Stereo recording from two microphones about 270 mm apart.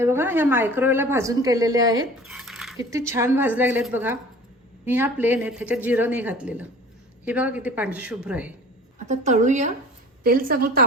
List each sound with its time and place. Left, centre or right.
0.0 s a woman's voice: centre
2.2 s a sound: centre
2.7 s a woman's voice: centre
9.0 s a woman's voice: right